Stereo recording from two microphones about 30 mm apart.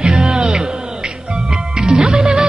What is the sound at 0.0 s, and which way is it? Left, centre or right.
Music, right.